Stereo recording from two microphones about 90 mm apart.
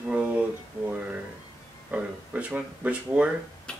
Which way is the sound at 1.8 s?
15° right (ahead or behind).